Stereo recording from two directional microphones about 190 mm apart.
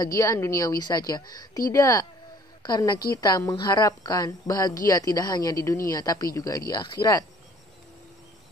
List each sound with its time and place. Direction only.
0.0 s a woman's voice: 15° left (ahead or behind)